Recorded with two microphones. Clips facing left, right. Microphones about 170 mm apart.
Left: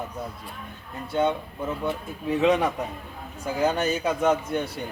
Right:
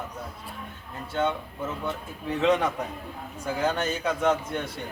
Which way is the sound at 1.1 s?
15° left (ahead or behind).